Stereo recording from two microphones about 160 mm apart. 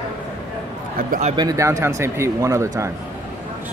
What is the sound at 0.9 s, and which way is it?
Speech, 60° right (ahead or behind).